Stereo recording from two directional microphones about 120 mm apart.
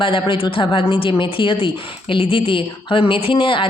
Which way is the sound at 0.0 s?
45° left (ahead or behind).